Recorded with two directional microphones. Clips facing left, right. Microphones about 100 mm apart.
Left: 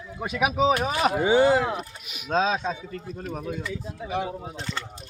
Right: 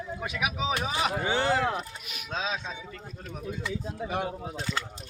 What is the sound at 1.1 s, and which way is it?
Speech, 15° left (ahead or behind).